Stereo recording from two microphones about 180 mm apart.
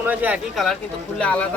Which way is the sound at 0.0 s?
10° right (ahead or behind).